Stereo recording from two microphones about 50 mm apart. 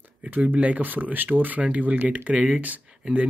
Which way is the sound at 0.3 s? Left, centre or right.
Right.